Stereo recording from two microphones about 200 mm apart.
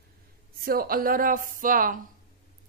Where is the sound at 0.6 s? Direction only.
45° right (ahead or behind).